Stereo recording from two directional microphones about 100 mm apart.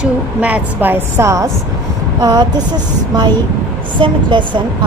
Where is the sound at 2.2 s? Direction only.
45° right (ahead or behind).